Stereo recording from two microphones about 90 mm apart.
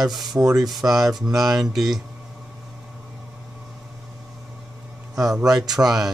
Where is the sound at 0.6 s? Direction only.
Centre (ahead or behind).